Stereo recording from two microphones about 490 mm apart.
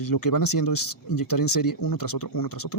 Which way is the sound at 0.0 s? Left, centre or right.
Left.